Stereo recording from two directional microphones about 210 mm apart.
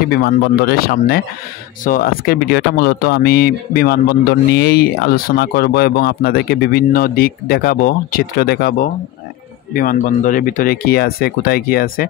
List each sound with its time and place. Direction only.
0.1 s speech: 45° left (ahead or behind)